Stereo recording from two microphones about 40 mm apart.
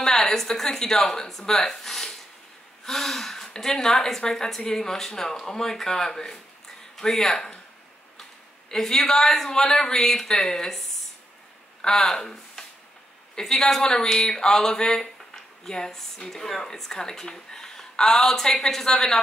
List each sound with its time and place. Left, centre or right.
0.0 s speech: centre
12.0 s speech: centre